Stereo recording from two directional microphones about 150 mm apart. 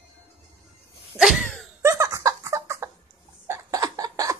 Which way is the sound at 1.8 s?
20° right (ahead or behind).